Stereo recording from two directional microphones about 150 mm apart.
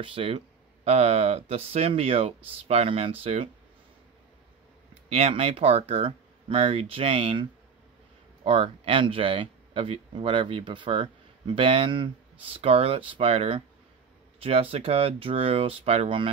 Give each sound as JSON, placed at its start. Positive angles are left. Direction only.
{"t": 0.0, "sound": "speech", "side_deg": -35}
{"t": 5.1, "sound": "speech", "side_deg": -40}
{"t": 8.5, "sound": "speech", "side_deg": -40}